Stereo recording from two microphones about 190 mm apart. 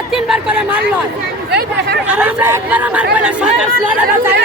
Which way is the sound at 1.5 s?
60° right (ahead or behind).